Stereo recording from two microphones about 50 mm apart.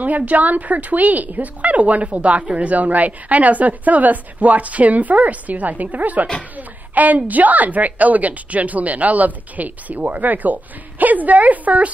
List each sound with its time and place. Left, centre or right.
0.0 s a woman's voice: right